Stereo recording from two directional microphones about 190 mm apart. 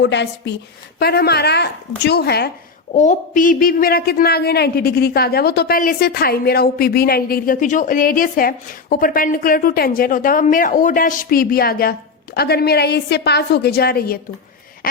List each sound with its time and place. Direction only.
0.0 s speech: 65° left (ahead or behind)
0.9 s speech: 55° left (ahead or behind)
2.9 s a man's voice: 40° left (ahead or behind)